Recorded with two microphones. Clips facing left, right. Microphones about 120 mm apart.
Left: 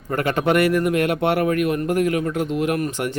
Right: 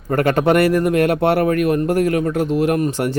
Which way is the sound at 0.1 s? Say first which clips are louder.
Right 4 dB; 40° right (ahead or behind).